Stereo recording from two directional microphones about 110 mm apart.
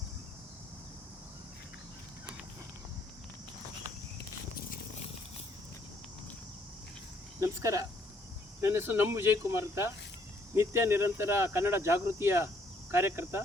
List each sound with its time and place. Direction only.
7.3 s speech: 30° right (ahead or behind)